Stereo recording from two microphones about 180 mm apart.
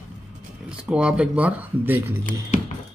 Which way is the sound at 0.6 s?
5° right (ahead or behind).